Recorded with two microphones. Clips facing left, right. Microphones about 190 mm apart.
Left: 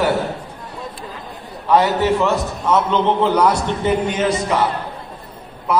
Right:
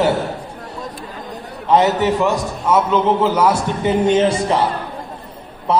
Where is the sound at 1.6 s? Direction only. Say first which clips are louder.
Right 1 dB; 20° right (ahead or behind).